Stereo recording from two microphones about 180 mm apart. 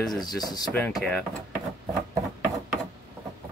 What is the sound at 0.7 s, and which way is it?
Speech, 10° left (ahead or behind).